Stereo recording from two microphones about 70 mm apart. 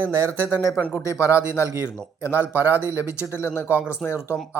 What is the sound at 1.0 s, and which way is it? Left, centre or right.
Speech, left.